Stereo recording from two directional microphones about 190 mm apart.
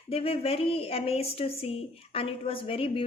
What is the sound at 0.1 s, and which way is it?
A woman's voice, 30° left (ahead or behind).